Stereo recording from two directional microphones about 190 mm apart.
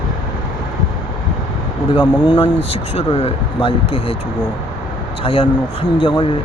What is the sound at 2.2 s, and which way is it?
Speech, 25° left (ahead or behind).